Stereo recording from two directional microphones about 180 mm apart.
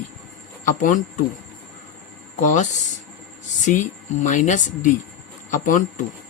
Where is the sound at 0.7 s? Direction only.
45° left (ahead or behind).